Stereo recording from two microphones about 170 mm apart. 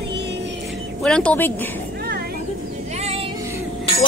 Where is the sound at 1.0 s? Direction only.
5° left (ahead or behind).